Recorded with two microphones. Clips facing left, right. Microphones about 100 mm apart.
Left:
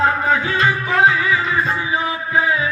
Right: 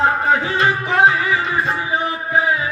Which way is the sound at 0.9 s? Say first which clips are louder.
Even; 55° right (ahead or behind).